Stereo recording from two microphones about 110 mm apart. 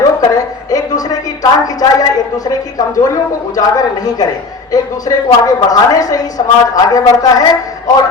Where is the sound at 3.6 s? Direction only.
35° left (ahead or behind).